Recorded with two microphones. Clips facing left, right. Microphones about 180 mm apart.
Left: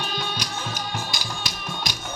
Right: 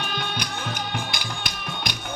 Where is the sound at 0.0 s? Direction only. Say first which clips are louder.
Even; 55° right (ahead or behind).